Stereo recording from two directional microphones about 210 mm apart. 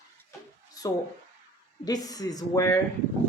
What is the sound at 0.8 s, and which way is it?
Speech, 15° left (ahead or behind).